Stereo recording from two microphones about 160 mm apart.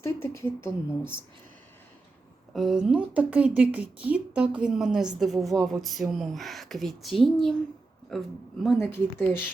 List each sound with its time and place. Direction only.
0.0 s speech: 15° left (ahead or behind)
2.5 s a woman's voice: centre (ahead or behind)
8.8 s speech: 15° left (ahead or behind)